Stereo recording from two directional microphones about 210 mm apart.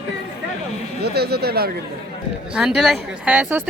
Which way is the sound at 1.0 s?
50° right (ahead or behind).